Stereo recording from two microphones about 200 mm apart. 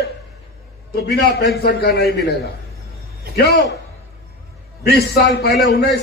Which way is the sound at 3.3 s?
55° left (ahead or behind).